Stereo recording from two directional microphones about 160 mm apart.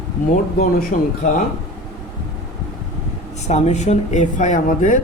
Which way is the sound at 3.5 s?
45° left (ahead or behind).